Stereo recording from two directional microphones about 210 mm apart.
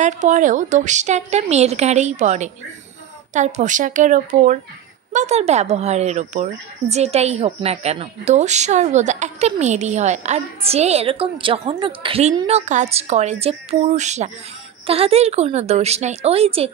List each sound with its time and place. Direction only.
0.0 s a woman's voice: 35° right (ahead or behind)